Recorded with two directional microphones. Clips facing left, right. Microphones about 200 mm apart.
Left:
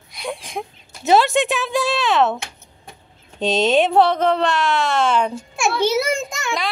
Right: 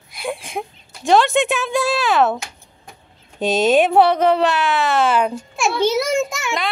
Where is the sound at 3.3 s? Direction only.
5° right (ahead or behind).